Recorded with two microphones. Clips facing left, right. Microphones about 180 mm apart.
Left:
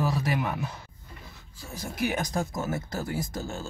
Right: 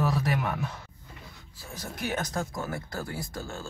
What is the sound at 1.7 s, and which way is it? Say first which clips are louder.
Speech: left 3 dB; 10° left (ahead or behind).